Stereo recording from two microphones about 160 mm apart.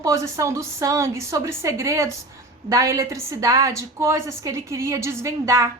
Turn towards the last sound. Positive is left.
turn(degrees=-20)  # may be behind; listen again after turning